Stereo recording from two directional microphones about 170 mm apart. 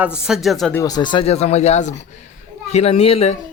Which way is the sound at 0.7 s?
20° left (ahead or behind).